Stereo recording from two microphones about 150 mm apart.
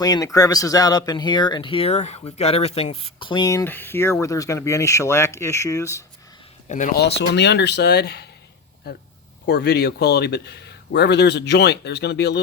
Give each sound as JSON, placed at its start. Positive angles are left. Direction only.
{"t": 0.0, "sound": "speech", "side_deg": 25}
{"t": 6.7, "sound": "speech", "side_deg": 55}
{"t": 9.5, "sound": "speech", "side_deg": 90}